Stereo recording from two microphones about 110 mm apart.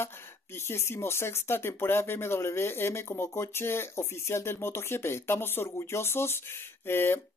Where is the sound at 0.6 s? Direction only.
25° left (ahead or behind).